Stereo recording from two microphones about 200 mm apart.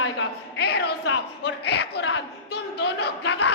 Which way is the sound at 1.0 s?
65° left (ahead or behind).